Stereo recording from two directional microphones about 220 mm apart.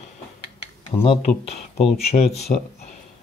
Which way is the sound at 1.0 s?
30° left (ahead or behind).